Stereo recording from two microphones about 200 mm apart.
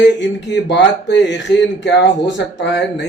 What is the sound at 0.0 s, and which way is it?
Speech, 60° left (ahead or behind).